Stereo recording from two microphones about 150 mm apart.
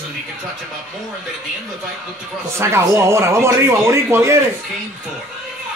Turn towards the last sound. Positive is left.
turn(degrees=-20)  # may be behind; listen again after turning